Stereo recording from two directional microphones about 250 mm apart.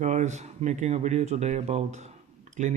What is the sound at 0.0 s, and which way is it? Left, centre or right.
Speech, right.